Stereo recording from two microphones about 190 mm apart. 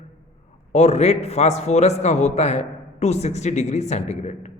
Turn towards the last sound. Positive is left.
turn(degrees=35)  # may be behind; listen again after turning